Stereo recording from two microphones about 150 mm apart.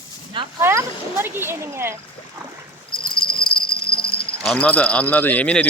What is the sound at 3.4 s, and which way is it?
Cricket, 90° left.